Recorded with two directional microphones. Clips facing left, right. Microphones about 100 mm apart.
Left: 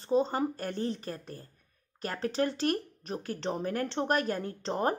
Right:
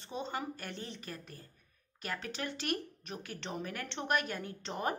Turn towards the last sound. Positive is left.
turn(degrees=35)  # may be behind; listen again after turning